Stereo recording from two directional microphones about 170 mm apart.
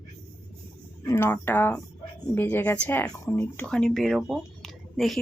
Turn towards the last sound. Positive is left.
turn(degrees=0)  # may be behind; listen again after turning